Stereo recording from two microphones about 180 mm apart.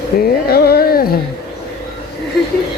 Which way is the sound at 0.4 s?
60° left (ahead or behind).